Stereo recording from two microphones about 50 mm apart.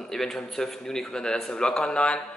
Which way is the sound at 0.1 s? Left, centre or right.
Centre.